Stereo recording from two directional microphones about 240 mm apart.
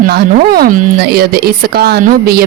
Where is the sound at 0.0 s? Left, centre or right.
Right.